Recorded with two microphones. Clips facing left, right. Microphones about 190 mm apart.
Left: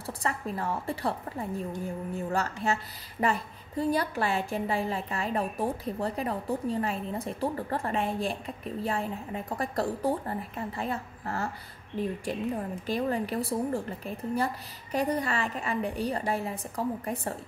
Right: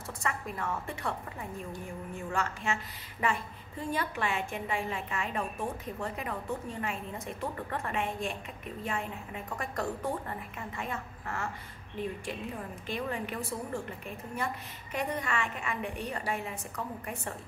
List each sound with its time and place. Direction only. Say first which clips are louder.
0.0 s a woman's voice: left 3 dB; 35° left (ahead or behind)